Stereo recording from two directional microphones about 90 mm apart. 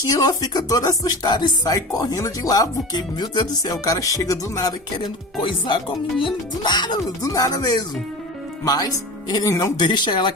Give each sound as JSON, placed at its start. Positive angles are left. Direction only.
{"t": 0.0, "sound": "speech", "side_deg": 45}
{"t": 4.9, "sound": "speech", "side_deg": 65}
{"t": 7.2, "sound": "speech", "side_deg": 40}
{"t": 9.7, "sound": "speech", "side_deg": 55}